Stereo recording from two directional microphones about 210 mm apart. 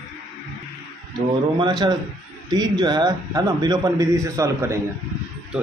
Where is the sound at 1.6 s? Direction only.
20° right (ahead or behind).